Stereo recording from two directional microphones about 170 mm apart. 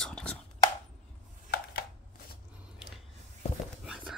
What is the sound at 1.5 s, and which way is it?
Chopping, 70° left (ahead or behind).